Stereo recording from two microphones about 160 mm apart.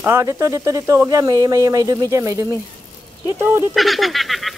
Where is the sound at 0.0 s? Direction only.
15° right (ahead or behind).